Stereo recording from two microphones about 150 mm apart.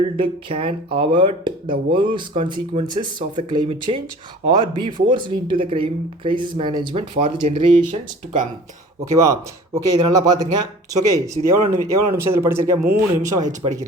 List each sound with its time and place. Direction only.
0.0 s speech: 35° right (ahead or behind)
7.2 s speech: 50° right (ahead or behind)
9.1 s speech: 20° right (ahead or behind)